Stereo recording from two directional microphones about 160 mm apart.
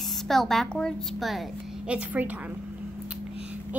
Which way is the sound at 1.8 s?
10° right (ahead or behind).